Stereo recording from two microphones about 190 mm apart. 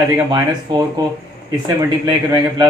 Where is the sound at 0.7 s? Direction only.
25° right (ahead or behind).